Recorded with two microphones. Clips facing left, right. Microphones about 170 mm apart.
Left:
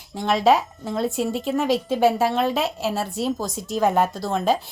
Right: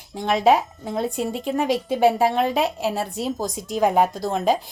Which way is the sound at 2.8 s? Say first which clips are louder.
Right 1 dB; 20° right (ahead or behind).